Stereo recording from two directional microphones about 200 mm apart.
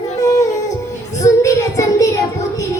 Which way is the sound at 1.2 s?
15° left (ahead or behind).